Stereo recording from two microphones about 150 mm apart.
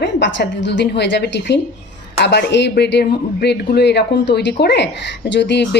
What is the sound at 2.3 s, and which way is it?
A woman's voice, 90° left.